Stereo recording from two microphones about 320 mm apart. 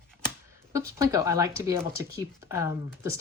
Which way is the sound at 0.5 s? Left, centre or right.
Centre.